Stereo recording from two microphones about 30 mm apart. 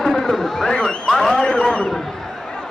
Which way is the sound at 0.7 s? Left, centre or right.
Left.